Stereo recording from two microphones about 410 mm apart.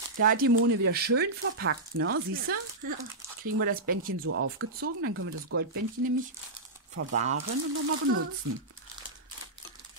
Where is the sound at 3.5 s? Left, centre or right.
Right.